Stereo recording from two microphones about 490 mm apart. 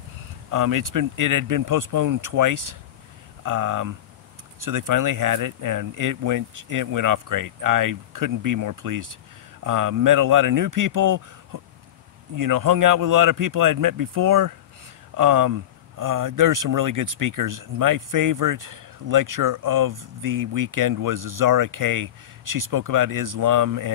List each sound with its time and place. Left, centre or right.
0.5 s speech: right